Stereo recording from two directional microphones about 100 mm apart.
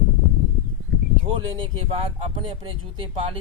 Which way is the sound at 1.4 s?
60° right (ahead or behind).